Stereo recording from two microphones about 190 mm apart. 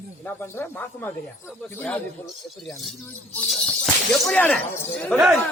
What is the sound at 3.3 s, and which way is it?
Speech, 5° left (ahead or behind).